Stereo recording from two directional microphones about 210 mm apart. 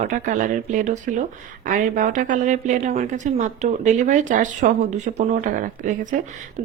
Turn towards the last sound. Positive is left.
turn(degrees=-35)  # may be behind; listen again after turning